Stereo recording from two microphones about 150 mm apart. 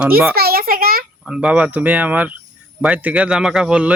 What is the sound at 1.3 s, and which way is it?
Speech, 5° right (ahead or behind).